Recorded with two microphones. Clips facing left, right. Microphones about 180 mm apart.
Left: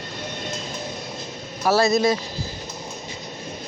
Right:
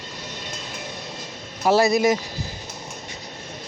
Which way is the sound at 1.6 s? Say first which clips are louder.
Right 1 dB; 15° right (ahead or behind).